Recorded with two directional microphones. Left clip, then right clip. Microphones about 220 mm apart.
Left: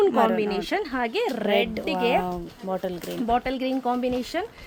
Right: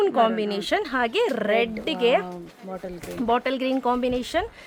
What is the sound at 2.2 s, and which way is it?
Speech, 40° left (ahead or behind).